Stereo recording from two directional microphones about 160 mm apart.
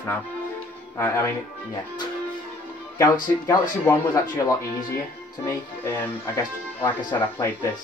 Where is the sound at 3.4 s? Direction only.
20° left (ahead or behind).